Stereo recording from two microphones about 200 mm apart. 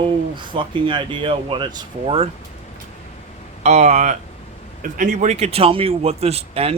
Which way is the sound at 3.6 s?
35° right (ahead or behind).